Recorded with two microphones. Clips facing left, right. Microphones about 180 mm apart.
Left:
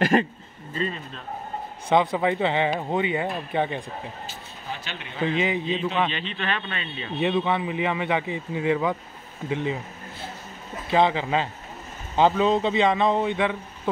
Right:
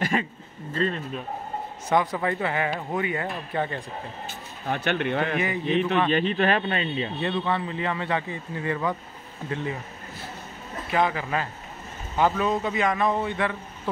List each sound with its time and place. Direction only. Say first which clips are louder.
0.1 s speech: left 6 dB; 35° left (ahead or behind)
0.7 s a sound: right 3 dB; 5° left (ahead or behind)
1.9 s speech: left 3 dB; 25° left (ahead or behind)
4.3 s speech: right 6 dB; 60° right (ahead or behind)
6.0 s speech: right 7 dB; 45° right (ahead or behind)
7.2 s speech: left 6 dB; 15° left (ahead or behind)
10.9 s speech: left 4 dB; 25° left (ahead or behind)